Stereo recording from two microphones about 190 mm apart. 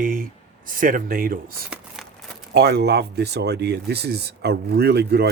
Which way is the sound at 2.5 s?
60° right (ahead or behind).